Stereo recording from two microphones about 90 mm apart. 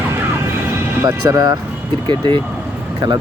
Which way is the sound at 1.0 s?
50° right (ahead or behind).